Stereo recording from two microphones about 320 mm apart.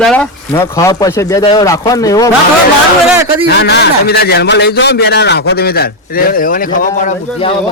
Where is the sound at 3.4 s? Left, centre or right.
Left.